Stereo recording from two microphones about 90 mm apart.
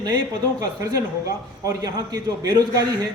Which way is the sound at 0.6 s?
40° right (ahead or behind).